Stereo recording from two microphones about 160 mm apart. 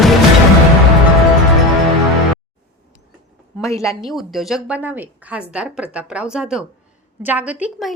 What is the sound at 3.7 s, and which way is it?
Speech, 20° left (ahead or behind).